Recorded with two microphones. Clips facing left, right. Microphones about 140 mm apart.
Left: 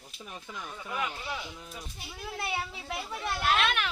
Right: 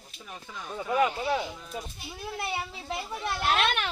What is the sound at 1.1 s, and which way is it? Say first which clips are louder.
Speech: right 9 dB; 60° right (ahead or behind).